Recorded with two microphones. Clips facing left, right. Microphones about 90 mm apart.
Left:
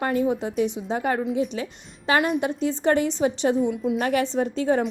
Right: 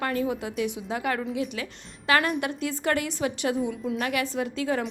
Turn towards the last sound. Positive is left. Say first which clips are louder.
# left 5 dB
turn(degrees=35)  # may be behind; listen again after turning